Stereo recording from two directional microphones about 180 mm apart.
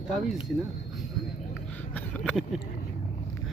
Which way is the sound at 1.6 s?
10° left (ahead or behind).